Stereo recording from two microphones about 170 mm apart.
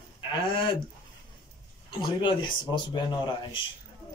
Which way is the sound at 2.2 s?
25° left (ahead or behind).